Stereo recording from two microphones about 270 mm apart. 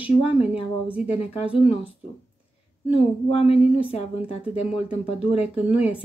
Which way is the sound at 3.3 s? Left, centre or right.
Left.